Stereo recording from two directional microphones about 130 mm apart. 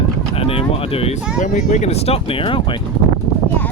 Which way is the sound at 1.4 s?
65° left (ahead or behind).